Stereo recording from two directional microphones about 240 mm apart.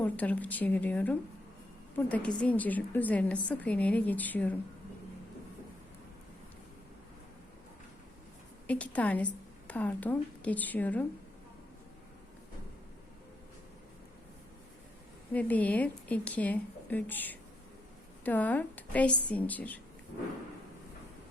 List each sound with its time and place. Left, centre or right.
0.0 s a woman's voice: centre
8.6 s a woman's voice: centre
15.3 s a woman's voice: centre